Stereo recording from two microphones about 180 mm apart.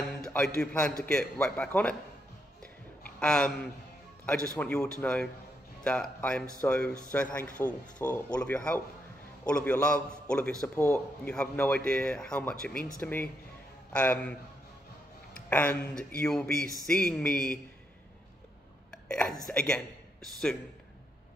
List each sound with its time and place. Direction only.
0.2 s a sound: 10° left (ahead or behind)
0.6 s speech: 5° left (ahead or behind)
3.0 s a sound: 5° left (ahead or behind)
4.6 s a man's voice: 10° left (ahead or behind)
15.3 s speech: 10° left (ahead or behind)
18.9 s hiccup: 5° left (ahead or behind)
19.4 s speech: 5° left (ahead or behind)